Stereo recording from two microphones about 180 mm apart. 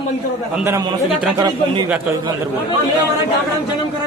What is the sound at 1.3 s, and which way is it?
Speech, 20° right (ahead or behind).